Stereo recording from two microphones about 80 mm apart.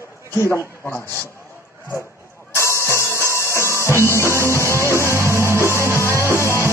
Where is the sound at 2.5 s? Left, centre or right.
Left.